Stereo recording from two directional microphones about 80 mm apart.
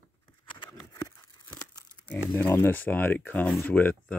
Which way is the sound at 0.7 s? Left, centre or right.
Left.